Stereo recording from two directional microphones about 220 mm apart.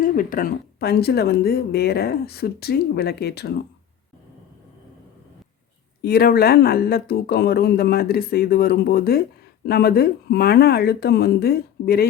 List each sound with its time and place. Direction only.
0.0 s speech: 40° left (ahead or behind)
6.0 s speech: 45° left (ahead or behind)